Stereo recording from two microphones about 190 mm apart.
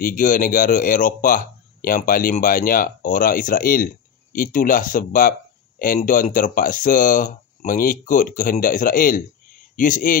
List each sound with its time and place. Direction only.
0.0 s speech: 45° left (ahead or behind)